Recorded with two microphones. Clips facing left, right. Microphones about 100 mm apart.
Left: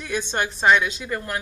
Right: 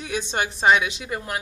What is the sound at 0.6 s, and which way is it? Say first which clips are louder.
Speech: even; 20° right (ahead or behind).